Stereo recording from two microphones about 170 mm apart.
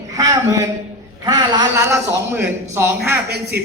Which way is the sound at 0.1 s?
20° right (ahead or behind).